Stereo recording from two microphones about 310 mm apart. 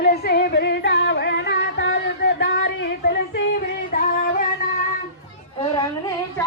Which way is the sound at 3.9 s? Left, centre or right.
Left.